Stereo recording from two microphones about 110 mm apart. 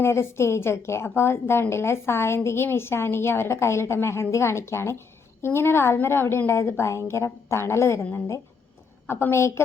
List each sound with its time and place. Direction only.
0.0 s a woman's voice: 25° left (ahead or behind)